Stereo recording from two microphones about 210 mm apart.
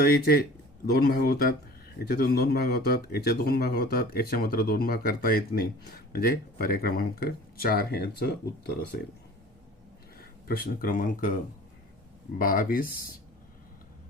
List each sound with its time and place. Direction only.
0.0 s speech: 45° left (ahead or behind)
10.2 s speech: 45° left (ahead or behind)
12.4 s speech: 40° left (ahead or behind)